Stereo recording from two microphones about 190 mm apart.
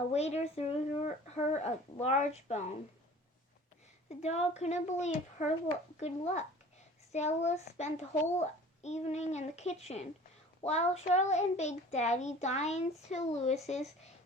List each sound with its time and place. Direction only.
0.1 s a child's voice: 35° left (ahead or behind)
4.2 s a child's voice: 35° left (ahead or behind)